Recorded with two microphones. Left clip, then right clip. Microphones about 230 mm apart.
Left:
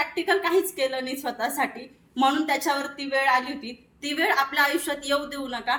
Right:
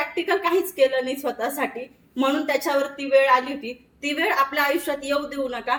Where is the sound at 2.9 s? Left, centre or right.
Centre.